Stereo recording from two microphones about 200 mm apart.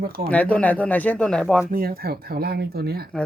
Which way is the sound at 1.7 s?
45° right (ahead or behind).